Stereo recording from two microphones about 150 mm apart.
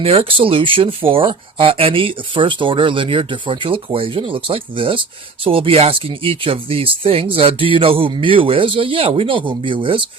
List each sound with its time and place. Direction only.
0.0 s speech: 40° right (ahead or behind)